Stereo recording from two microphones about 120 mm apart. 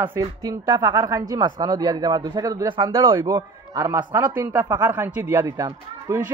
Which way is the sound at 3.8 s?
20° right (ahead or behind).